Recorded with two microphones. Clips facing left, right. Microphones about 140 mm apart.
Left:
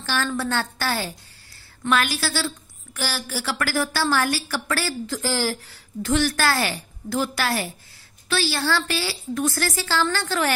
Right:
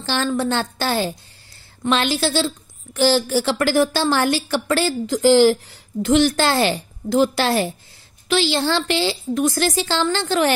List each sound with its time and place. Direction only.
0.0 s a woman's voice: 25° right (ahead or behind)